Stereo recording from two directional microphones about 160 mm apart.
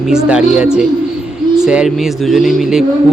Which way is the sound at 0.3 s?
5° right (ahead or behind).